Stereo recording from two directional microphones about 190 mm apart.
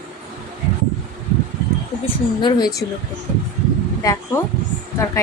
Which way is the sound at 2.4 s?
20° left (ahead or behind).